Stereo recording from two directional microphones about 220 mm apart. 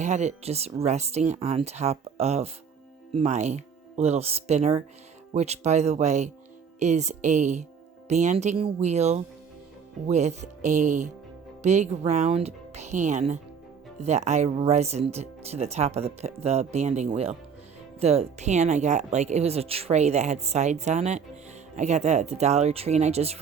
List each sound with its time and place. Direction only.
0.0 s speech: 30° right (ahead or behind)